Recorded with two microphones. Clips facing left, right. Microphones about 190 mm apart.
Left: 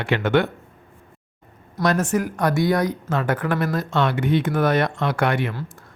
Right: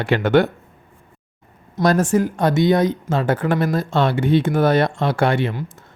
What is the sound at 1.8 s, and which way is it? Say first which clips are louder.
Speech: right 4 dB; 30° right (ahead or behind).